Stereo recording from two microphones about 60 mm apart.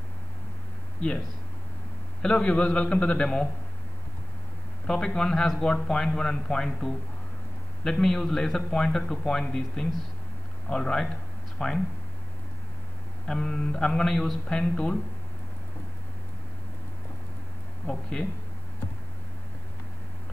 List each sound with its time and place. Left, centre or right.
2.2 s a man's voice: centre
4.8 s a man's voice: centre
13.3 s a man's voice: centre
14.5 s a man's voice: centre
18.1 s a man's voice: centre